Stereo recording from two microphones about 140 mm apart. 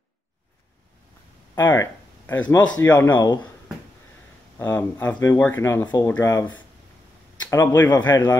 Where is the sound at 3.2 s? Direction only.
30° left (ahead or behind).